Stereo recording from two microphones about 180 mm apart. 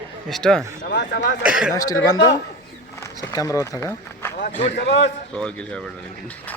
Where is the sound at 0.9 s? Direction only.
75° left (ahead or behind).